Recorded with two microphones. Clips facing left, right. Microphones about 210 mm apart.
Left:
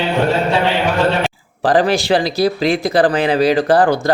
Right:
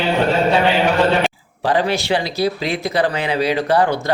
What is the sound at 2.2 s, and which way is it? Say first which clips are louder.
Speech: left 4 dB; 40° left (ahead or behind).